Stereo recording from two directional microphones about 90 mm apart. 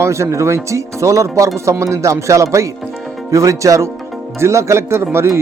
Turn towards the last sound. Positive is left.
turn(degrees=-30)  # may be behind; listen again after turning